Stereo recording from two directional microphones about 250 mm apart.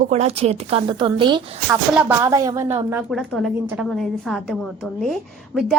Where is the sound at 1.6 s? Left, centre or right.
Centre.